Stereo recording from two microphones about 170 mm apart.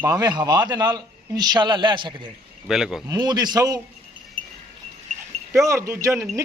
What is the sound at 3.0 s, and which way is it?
Speech, 20° right (ahead or behind).